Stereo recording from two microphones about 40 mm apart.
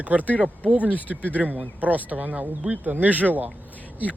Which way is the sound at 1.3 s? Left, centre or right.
Right.